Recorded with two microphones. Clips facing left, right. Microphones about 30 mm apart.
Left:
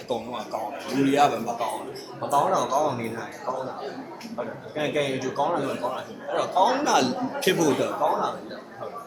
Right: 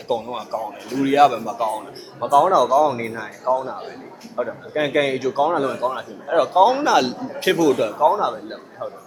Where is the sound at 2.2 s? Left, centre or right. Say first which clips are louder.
Right 7 dB; right.